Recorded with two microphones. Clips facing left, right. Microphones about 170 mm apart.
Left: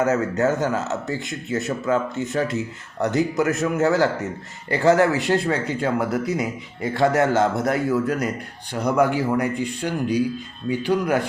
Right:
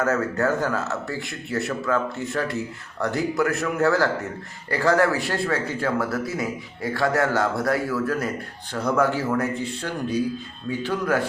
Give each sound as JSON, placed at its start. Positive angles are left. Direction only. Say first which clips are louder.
{"t": 0.0, "sound": "speech", "louder": "left 3 dB", "side_deg": 20}